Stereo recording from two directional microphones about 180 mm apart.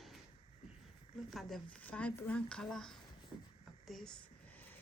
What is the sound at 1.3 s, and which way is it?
Speech, centre (ahead or behind).